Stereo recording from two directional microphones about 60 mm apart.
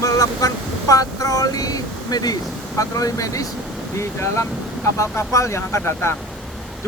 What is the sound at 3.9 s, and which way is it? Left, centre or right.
Speech, left.